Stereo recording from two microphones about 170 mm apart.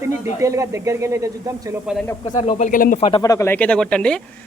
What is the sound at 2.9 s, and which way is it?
Speech, 35° left (ahead or behind).